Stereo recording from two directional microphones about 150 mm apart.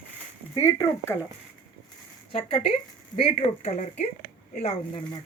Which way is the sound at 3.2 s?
50° left (ahead or behind).